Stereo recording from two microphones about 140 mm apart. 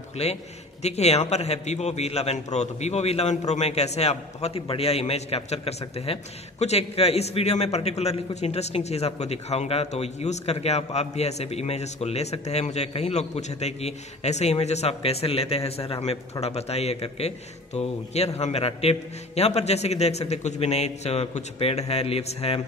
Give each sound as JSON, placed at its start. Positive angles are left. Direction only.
{"t": 0.2, "sound": "a man's voice", "side_deg": 50}